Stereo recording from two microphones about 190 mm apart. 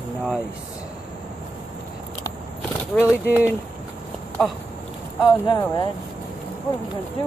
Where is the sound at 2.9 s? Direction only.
Centre (ahead or behind).